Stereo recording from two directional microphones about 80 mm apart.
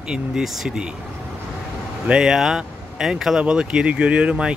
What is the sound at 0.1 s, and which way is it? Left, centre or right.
Speech, centre.